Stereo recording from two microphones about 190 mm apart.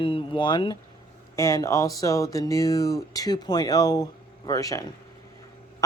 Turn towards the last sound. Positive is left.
turn(degrees=20)  # may be behind; listen again after turning